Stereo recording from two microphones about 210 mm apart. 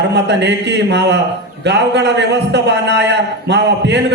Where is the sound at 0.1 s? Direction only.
55° right (ahead or behind).